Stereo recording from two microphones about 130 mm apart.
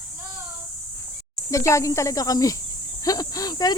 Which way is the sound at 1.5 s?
25° left (ahead or behind).